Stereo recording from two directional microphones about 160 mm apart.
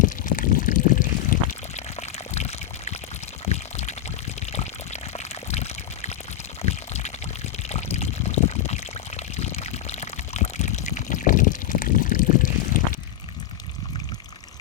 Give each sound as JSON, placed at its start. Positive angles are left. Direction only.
{"t": 0.0, "sound": "pour", "side_deg": 55}